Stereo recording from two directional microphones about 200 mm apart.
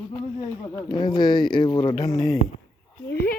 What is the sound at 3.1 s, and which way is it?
Speech, 50° left (ahead or behind).